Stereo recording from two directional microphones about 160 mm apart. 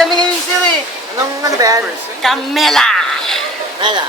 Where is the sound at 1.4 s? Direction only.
20° right (ahead or behind).